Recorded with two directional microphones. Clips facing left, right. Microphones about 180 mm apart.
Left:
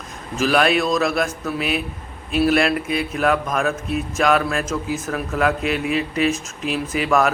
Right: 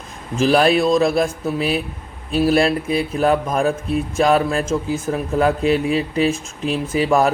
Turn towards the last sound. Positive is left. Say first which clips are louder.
# right 2 dB
turn(degrees=-30)  # may be behind; listen again after turning